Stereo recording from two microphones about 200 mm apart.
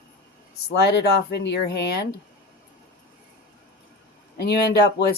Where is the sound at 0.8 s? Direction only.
55° left (ahead or behind).